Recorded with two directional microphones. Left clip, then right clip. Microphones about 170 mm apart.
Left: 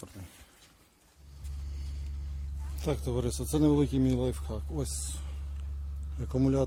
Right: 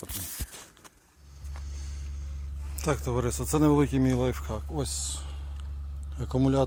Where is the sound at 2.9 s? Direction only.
10° left (ahead or behind).